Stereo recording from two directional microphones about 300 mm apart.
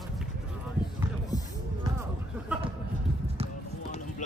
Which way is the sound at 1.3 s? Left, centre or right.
Centre.